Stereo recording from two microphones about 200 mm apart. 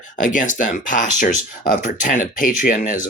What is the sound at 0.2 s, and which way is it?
Speech, 40° left (ahead or behind).